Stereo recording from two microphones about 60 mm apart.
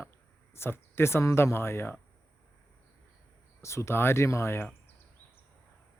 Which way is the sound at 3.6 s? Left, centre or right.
Left.